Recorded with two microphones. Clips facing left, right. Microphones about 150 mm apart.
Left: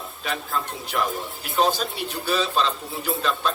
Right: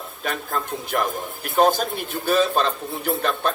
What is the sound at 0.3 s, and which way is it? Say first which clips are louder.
Speech: right 2 dB; 50° right (ahead or behind).